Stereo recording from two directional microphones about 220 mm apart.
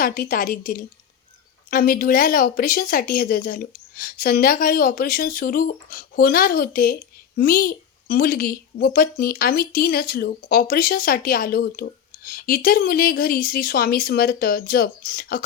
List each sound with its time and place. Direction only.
0.0 s speech: 40° left (ahead or behind)